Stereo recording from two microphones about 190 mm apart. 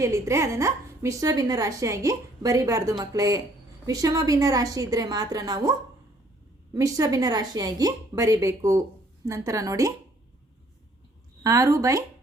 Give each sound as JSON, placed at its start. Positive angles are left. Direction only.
{"t": 0.0, "sound": "a woman's voice", "side_deg": -15}
{"t": 6.7, "sound": "a woman's voice", "side_deg": -15}
{"t": 11.4, "sound": "a woman's voice", "side_deg": -15}